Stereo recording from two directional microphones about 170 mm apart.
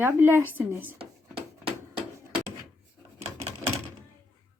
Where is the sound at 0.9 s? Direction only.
35° right (ahead or behind).